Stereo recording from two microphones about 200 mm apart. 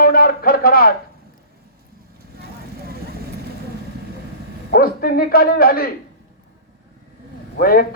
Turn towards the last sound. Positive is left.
turn(degrees=45)  # may be behind; listen again after turning